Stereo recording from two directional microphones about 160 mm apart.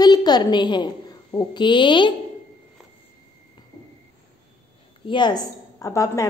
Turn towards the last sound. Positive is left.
turn(degrees=20)  # may be behind; listen again after turning